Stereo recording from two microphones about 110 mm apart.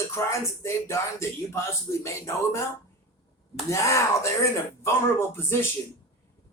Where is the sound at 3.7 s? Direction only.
25° left (ahead or behind).